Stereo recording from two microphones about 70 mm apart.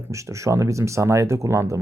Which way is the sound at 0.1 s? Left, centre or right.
Right.